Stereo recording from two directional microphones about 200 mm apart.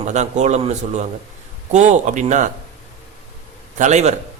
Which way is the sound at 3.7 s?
35° right (ahead or behind).